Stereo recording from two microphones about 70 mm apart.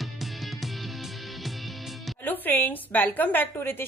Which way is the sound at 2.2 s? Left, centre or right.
Left.